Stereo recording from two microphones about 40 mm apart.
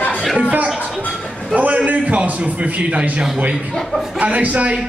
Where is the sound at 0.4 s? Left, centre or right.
Right.